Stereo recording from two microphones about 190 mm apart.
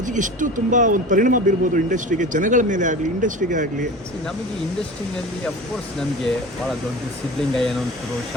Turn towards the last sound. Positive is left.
turn(degrees=0)  # may be behind; listen again after turning